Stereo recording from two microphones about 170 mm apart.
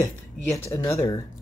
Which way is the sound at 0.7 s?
15° left (ahead or behind).